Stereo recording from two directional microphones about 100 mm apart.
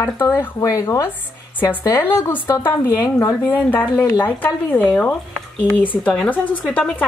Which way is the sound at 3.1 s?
20° left (ahead or behind).